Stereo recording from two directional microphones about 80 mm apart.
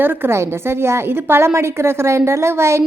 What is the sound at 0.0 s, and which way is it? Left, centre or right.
A woman's voice, right.